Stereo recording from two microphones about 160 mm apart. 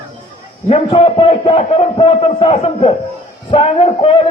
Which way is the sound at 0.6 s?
35° left (ahead or behind).